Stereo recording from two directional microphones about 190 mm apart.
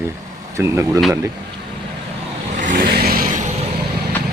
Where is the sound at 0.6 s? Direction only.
15° right (ahead or behind).